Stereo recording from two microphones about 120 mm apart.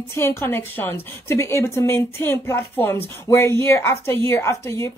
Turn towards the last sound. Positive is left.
turn(degrees=20)  # may be behind; listen again after turning